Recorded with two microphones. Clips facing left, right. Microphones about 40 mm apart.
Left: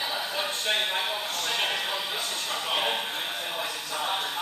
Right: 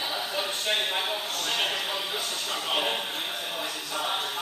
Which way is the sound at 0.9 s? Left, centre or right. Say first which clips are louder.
Even; centre.